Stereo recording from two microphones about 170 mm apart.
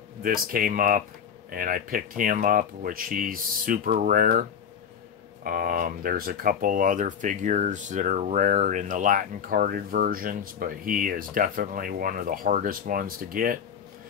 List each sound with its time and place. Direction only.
0.2 s speech: 55° right (ahead or behind)